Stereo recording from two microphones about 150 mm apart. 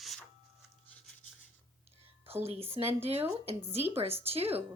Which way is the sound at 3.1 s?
40° right (ahead or behind).